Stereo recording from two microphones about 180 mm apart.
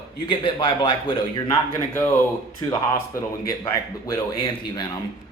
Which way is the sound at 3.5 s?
20° left (ahead or behind).